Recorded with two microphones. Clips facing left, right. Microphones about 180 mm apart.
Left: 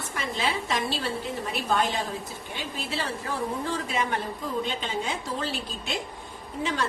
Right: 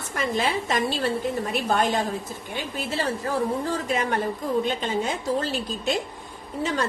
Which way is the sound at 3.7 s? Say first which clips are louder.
Right 3 dB; 45° right (ahead or behind).